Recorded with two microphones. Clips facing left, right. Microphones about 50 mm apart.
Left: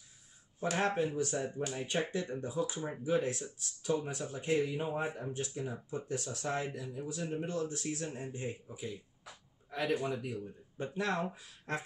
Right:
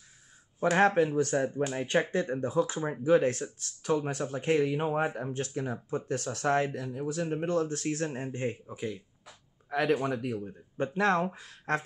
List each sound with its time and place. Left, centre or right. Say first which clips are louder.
0.7 s speech: right 8 dB; right